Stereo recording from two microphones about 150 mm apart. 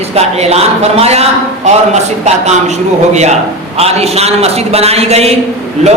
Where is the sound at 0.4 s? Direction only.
45° right (ahead or behind).